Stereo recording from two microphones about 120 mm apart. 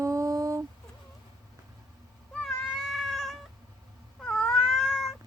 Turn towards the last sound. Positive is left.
turn(degrees=0)  # may be behind; listen again after turning